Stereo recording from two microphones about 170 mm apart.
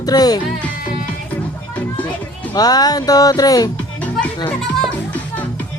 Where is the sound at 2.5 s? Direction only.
25° left (ahead or behind).